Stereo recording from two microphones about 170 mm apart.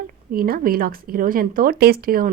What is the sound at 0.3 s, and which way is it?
Speech, 60° right (ahead or behind).